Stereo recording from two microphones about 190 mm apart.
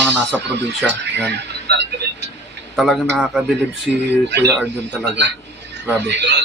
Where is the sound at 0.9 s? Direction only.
65° right (ahead or behind).